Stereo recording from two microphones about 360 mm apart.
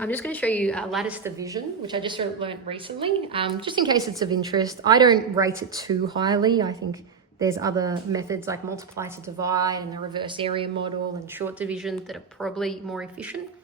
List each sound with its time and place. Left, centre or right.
0.0 s a woman's voice: centre